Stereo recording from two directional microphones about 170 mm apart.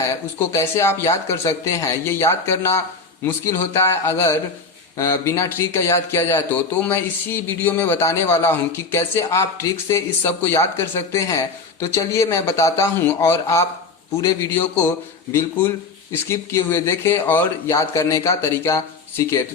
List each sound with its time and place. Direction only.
0.0 s a man's voice: 15° left (ahead or behind)
16.3 s a man's voice: 15° left (ahead or behind)